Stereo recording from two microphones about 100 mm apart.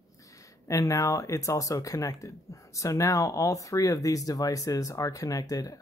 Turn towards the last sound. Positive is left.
turn(degrees=35)  # may be behind; listen again after turning